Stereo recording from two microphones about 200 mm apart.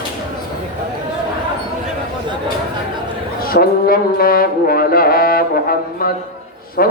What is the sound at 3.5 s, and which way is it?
Brass instrument, 45° left (ahead or behind).